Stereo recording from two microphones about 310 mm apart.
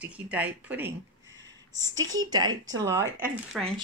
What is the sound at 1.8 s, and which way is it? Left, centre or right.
Speech, right.